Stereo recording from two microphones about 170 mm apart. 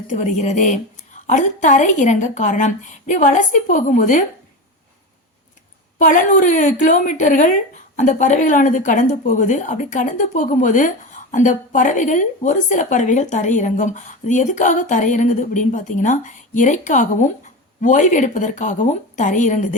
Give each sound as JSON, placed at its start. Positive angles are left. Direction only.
{"t": 0.1, "sound": "a woman's voice", "side_deg": 45}
{"t": 6.0, "sound": "a woman's voice", "side_deg": 50}